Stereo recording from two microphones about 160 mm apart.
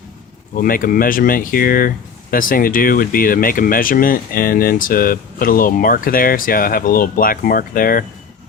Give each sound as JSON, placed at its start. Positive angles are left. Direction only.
{"t": 0.5, "sound": "speech", "side_deg": 60}